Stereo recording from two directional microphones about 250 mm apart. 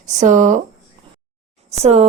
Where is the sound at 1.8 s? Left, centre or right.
Right.